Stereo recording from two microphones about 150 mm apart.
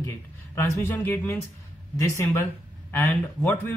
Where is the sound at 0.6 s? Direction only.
20° left (ahead or behind).